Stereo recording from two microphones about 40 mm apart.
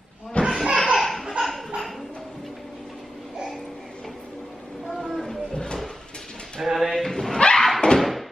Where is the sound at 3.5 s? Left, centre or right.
Centre.